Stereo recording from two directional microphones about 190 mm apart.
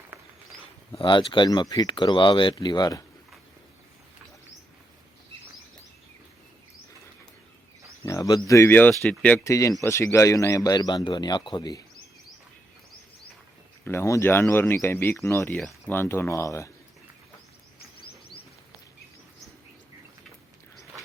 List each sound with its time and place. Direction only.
0.1 s a sound: 10° right (ahead or behind)
0.9 s a man's voice: 25° left (ahead or behind)
8.0 s bird: 15° left (ahead or behind)
8.4 s a man's voice: 15° left (ahead or behind)
13.8 s speech: 15° left (ahead or behind)